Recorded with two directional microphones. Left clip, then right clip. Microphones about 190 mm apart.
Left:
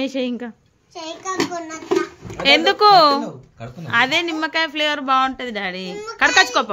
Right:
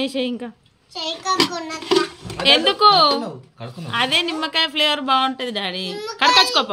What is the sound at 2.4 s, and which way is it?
Speech, 15° left (ahead or behind).